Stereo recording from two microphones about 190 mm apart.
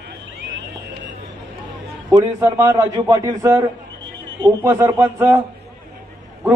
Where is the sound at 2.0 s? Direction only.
20° right (ahead or behind).